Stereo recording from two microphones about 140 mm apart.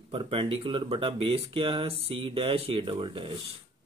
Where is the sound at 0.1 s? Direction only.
40° right (ahead or behind).